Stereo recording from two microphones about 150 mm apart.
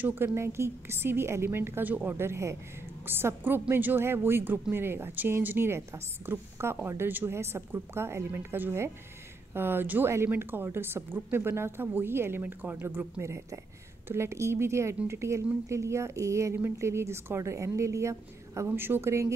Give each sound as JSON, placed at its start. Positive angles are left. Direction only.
{"t": 0.0, "sound": "a woman's voice", "side_deg": -15}